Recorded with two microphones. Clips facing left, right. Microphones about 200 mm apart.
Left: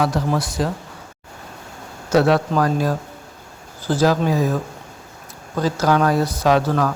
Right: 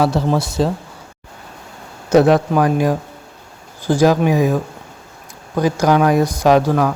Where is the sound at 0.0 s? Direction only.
30° right (ahead or behind).